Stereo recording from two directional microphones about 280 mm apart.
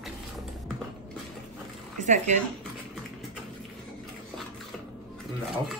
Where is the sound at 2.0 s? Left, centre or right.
Right.